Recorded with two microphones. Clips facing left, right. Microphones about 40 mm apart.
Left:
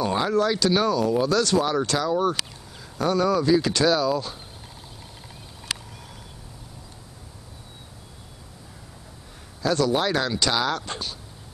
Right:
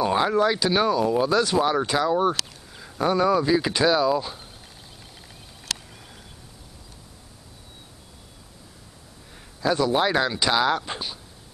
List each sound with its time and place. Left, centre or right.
0.0 s speech: centre
9.6 s speech: centre